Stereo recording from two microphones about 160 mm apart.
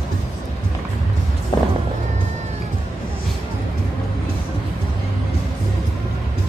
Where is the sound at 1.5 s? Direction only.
25° left (ahead or behind).